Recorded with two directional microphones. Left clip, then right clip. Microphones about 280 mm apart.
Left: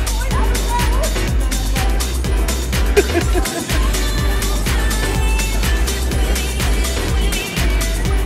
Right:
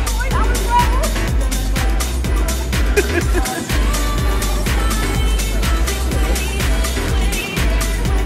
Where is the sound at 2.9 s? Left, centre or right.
Centre.